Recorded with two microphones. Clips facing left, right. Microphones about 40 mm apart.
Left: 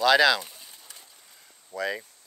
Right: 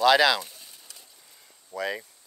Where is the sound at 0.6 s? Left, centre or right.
Left.